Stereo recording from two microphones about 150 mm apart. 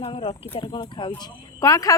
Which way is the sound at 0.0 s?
40° left (ahead or behind).